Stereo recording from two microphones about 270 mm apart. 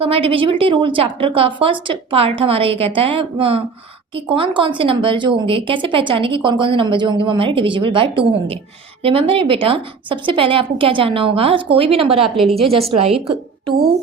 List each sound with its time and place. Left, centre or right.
0.0 s speech: centre
12.5 s a woman's voice: centre
13.0 s speech: right